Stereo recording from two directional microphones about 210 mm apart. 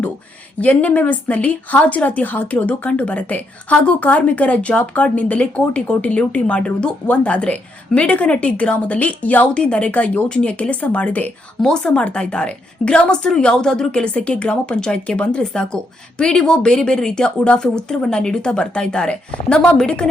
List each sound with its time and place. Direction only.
0.6 s a woman's voice: 5° left (ahead or behind)